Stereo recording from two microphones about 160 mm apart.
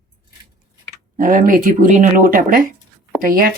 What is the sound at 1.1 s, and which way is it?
Speech, 55° right (ahead or behind).